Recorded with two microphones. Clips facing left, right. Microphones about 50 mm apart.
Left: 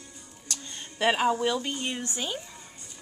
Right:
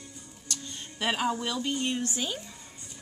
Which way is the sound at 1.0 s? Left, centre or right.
Centre.